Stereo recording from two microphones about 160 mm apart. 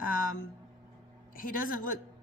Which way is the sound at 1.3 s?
60° left (ahead or behind).